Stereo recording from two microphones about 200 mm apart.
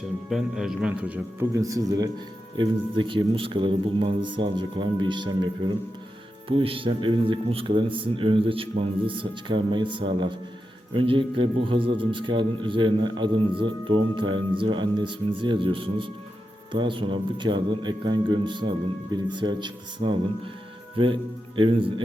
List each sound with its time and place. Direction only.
0.3 s a man's voice: centre (ahead or behind); by 22.0 s 25° right (ahead or behind)